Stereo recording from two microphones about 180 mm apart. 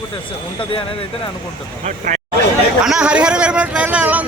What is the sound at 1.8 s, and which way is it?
Speech, 40° right (ahead or behind).